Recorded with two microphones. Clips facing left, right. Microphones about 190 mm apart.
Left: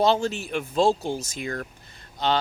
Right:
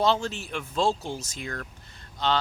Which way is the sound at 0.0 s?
15° left (ahead or behind).